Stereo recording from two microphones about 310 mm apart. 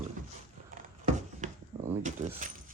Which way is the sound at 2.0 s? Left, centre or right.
Right.